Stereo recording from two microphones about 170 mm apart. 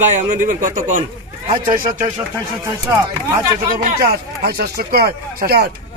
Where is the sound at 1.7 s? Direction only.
55° right (ahead or behind).